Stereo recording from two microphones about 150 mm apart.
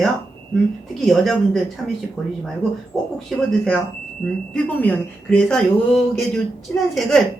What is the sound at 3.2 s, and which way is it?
A woman's voice, 5° left (ahead or behind).